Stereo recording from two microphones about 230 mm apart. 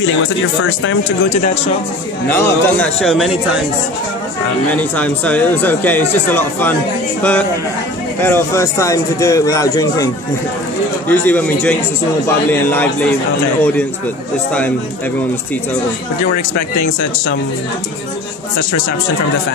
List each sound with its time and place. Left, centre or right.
0.0 s speech: left
2.3 s a man's voice: centre
4.6 s speech: centre
11.1 s speech: centre